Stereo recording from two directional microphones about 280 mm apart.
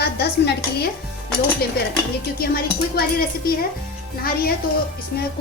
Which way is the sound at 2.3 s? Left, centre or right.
Left.